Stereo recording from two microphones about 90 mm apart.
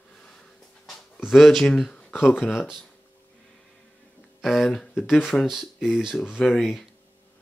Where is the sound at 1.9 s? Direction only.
15° left (ahead or behind).